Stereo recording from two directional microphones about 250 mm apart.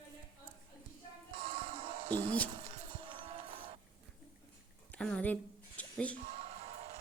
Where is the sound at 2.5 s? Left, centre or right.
Right.